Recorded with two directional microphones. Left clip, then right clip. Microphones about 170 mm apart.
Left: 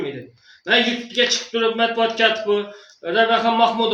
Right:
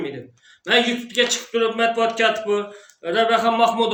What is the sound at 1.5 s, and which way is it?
A man's voice, 10° right (ahead or behind).